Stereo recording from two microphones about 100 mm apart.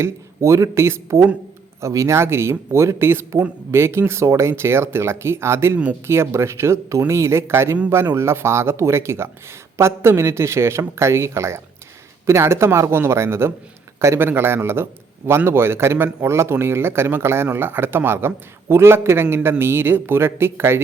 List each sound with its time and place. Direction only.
0.0 s speech: 30° right (ahead or behind)